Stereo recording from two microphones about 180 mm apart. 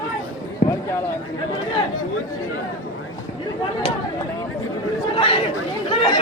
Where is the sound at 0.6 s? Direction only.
60° left (ahead or behind).